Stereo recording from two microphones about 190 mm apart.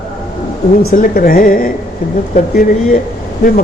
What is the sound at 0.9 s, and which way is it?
Speech, 50° left (ahead or behind).